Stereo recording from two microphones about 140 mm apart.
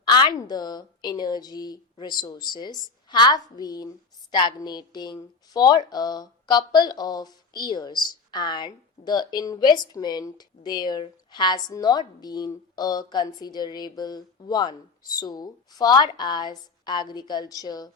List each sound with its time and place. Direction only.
0.0 s a woman's voice: 30° left (ahead or behind)